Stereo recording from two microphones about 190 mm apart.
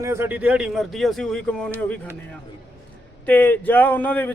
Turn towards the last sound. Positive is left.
turn(degrees=10)  # may be behind; listen again after turning